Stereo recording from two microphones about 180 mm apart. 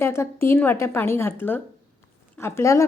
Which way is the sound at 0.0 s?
15° left (ahead or behind).